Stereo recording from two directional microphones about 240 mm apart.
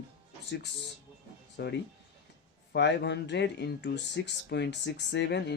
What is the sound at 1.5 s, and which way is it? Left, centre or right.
Speech, left.